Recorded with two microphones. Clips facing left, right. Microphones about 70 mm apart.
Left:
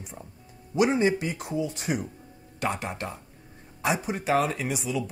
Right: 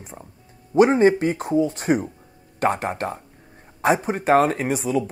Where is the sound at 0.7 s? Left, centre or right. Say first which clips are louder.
Right 8 dB; right.